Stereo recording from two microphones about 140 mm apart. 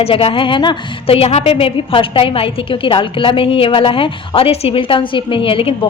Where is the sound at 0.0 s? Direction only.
45° left (ahead or behind).